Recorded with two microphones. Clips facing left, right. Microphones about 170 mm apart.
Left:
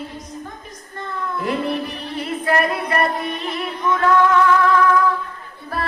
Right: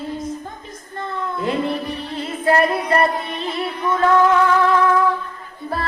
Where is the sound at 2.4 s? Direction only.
30° right (ahead or behind).